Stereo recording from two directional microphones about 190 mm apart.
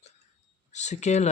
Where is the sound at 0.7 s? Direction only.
35° left (ahead or behind).